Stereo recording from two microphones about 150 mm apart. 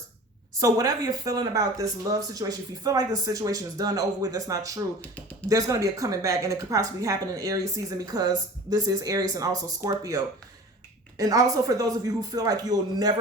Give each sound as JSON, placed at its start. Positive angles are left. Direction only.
{"t": 0.6, "sound": "a woman's voice", "side_deg": -25}
{"t": 4.9, "sound": "speech", "side_deg": 10}
{"t": 5.5, "sound": "a woman's voice", "side_deg": -20}